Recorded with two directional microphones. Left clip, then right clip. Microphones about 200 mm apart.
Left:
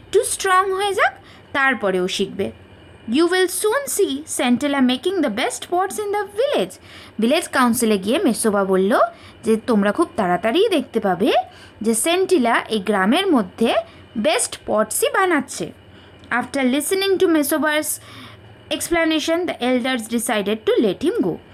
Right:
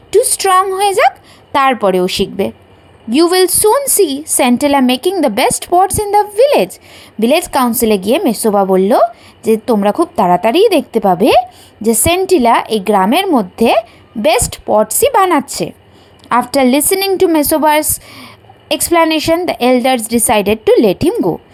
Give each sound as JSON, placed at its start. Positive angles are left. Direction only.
{"t": 0.1, "sound": "speech", "side_deg": -20}
{"t": 17.1, "sound": "speech", "side_deg": -15}